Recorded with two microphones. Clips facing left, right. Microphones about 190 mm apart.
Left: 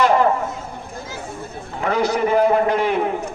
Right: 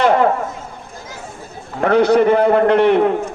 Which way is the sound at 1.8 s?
60° right (ahead or behind).